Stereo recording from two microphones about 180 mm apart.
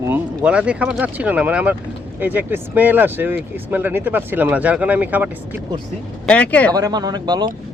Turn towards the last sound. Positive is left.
turn(degrees=-20)  # may be behind; listen again after turning